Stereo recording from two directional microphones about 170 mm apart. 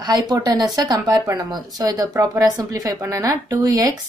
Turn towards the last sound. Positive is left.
turn(degrees=-20)  # may be behind; listen again after turning